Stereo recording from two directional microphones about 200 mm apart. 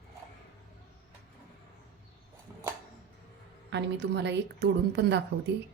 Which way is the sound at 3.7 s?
60° right (ahead or behind).